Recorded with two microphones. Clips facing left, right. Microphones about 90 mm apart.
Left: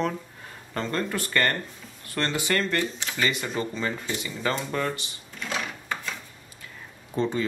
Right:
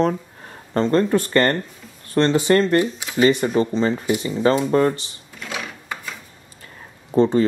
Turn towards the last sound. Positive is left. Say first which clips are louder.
# right 10 dB
turn(degrees=-35)  # may be behind; listen again after turning